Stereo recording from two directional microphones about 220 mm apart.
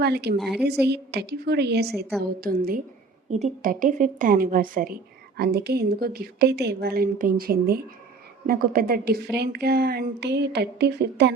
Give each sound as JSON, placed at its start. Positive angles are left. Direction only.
{"t": 0.0, "sound": "a woman's voice", "side_deg": -45}
{"t": 0.3, "sound": "a woman's voice", "side_deg": 0}
{"t": 0.9, "sound": "a woman's voice", "side_deg": -50}
{"t": 1.9, "sound": "a woman's voice", "side_deg": 0}
{"t": 2.4, "sound": "a woman's voice", "side_deg": -40}